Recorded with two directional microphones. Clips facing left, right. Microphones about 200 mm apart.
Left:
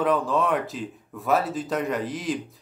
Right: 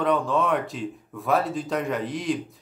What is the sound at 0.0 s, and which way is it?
Speech, centre (ahead or behind).